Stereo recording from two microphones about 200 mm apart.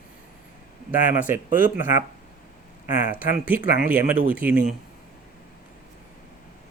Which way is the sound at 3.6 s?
40° left (ahead or behind).